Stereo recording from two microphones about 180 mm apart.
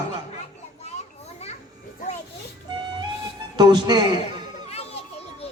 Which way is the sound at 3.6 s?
25° right (ahead or behind).